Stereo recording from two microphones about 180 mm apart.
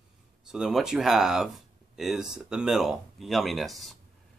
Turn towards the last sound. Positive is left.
turn(degrees=0)  # may be behind; listen again after turning